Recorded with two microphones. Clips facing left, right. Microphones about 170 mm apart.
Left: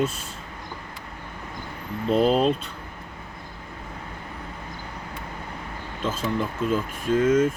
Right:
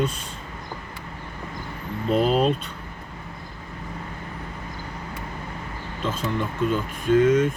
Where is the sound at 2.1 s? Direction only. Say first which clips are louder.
Left 1 dB; centre (ahead or behind).